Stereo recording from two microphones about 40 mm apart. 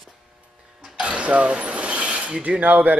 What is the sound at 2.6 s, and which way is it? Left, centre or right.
Speech, right.